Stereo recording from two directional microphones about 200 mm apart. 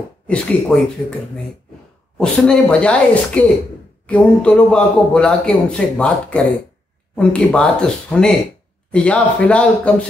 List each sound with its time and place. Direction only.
0.3 s a man's voice: 5° left (ahead or behind)
2.1 s a man's voice: 5° left (ahead or behind)